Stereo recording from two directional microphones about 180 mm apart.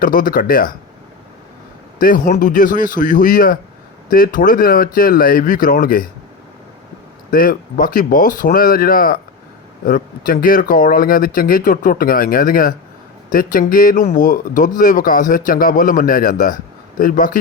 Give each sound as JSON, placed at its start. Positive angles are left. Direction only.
{"t": 0.0, "sound": "speech", "side_deg": 50}
{"t": 2.0, "sound": "speech", "side_deg": 50}
{"t": 7.3, "sound": "speech", "side_deg": 50}